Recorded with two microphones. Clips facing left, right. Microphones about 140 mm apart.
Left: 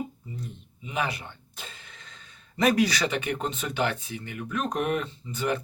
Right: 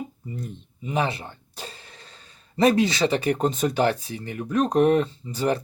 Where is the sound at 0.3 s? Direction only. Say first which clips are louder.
Right 5 dB; 45° right (ahead or behind).